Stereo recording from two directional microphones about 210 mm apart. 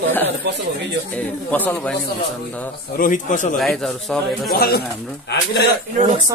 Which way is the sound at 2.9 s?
40° left (ahead or behind).